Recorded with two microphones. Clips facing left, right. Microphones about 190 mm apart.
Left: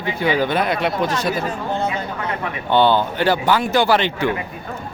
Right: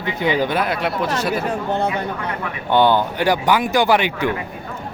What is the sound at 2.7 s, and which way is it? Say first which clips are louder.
Speech: even; 15° right (ahead or behind).